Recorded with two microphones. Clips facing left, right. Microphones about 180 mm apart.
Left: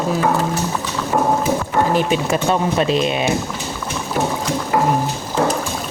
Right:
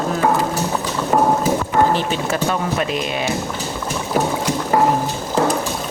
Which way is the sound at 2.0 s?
15° left (ahead or behind).